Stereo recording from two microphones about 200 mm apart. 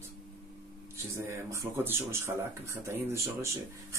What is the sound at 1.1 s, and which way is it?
Speech, 15° right (ahead or behind).